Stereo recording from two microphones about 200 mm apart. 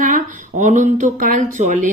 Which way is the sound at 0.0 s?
40° right (ahead or behind).